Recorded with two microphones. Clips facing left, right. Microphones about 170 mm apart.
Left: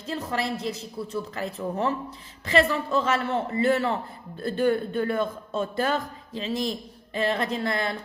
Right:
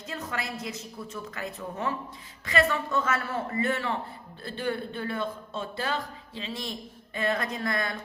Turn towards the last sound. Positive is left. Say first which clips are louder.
# left 3 dB
turn(degrees=30)  # may be behind; listen again after turning